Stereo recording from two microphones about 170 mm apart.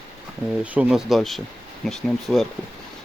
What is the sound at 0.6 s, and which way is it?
Speech, 5° right (ahead or behind).